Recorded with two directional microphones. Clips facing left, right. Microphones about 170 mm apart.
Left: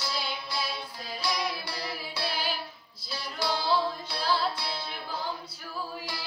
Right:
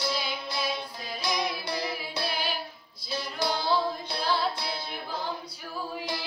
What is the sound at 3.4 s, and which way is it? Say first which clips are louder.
Music: even; 20° right (ahead or behind).